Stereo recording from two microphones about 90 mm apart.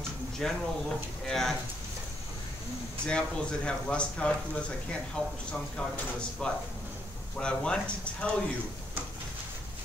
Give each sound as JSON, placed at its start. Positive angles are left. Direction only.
{"t": 0.4, "sound": "speech", "side_deg": 5}
{"t": 3.1, "sound": "speech", "side_deg": 10}